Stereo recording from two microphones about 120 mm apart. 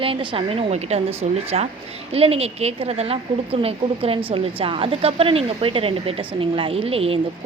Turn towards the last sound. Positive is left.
turn(degrees=-55)  # may be behind; listen again after turning